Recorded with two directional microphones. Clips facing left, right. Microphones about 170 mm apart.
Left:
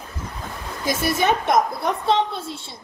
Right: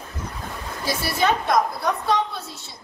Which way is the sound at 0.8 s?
20° left (ahead or behind).